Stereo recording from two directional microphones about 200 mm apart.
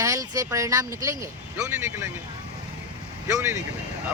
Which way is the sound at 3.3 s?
15° right (ahead or behind).